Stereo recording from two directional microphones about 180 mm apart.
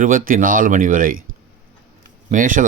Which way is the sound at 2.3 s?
50° right (ahead or behind).